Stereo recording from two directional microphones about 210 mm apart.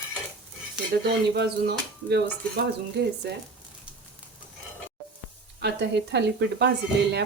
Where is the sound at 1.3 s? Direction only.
50° right (ahead or behind).